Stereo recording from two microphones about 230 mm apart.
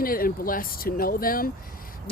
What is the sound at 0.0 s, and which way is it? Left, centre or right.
Speech, left.